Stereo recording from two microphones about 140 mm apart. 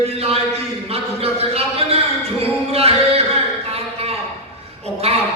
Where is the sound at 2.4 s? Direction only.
45° right (ahead or behind).